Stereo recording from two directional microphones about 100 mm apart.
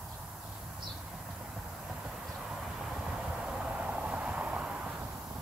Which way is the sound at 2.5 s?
5° right (ahead or behind).